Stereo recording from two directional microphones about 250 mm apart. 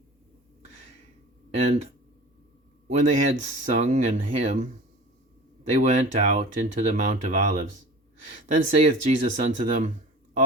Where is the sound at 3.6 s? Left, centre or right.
Right.